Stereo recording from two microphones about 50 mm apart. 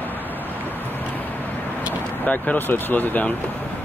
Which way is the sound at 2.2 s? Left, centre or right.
Left.